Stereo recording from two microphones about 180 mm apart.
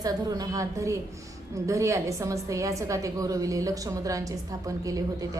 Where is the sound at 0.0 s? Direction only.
20° right (ahead or behind).